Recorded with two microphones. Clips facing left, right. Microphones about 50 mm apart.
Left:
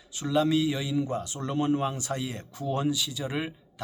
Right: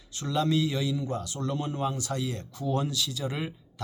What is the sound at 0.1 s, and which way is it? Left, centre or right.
Speech, centre.